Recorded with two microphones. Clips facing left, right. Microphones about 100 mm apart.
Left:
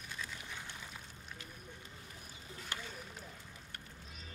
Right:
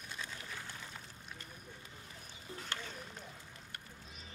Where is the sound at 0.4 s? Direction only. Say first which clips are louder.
Right 1 dB; 20° left (ahead or behind).